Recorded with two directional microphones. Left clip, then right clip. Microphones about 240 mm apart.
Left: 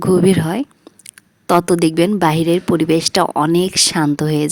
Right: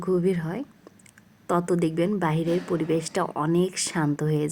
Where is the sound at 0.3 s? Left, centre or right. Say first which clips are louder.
Left 11 dB; left.